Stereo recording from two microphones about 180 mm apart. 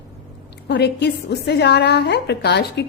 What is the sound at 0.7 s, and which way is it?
A woman's voice, 70° left (ahead or behind).